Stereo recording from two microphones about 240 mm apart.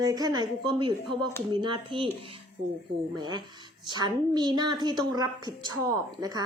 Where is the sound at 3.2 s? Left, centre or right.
Centre.